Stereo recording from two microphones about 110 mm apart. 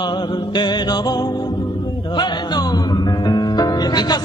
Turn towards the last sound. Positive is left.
turn(degrees=40)  # may be behind; listen again after turning